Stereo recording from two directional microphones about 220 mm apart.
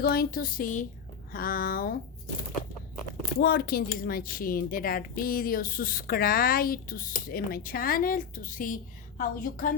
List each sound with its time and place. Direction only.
0.0 s speech: 45° left (ahead or behind)
3.4 s speech: 45° left (ahead or behind)